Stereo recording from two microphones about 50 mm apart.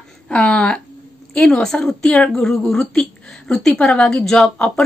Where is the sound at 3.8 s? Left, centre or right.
Left.